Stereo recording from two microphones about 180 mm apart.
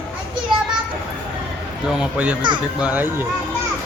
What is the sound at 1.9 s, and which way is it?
Speech, 5° right (ahead or behind).